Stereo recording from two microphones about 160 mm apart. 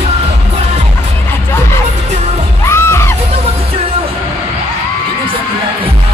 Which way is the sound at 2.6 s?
15° left (ahead or behind).